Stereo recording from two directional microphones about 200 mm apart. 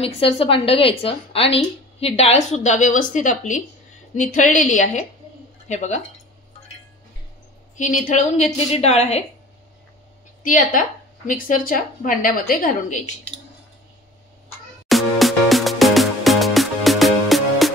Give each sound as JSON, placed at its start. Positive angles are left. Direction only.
{"t": 0.0, "sound": "a woman's voice", "side_deg": 30}
{"t": 7.7, "sound": "a woman's voice", "side_deg": 40}
{"t": 10.4, "sound": "a woman's voice", "side_deg": 40}
{"t": 14.9, "sound": "music", "side_deg": 0}